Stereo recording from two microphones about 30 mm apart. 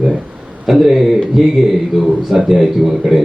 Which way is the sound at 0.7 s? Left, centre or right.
Centre.